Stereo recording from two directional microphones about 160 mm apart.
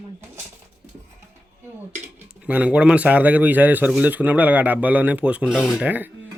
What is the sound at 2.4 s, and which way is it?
A man's voice, 10° right (ahead or behind).